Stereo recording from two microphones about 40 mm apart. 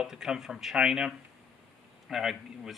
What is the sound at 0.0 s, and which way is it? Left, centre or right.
Speech, centre.